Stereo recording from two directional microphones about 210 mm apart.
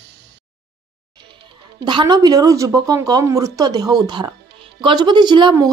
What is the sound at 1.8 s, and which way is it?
Speech, 20° right (ahead or behind).